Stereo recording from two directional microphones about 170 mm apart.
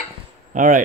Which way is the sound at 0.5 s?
50° right (ahead or behind).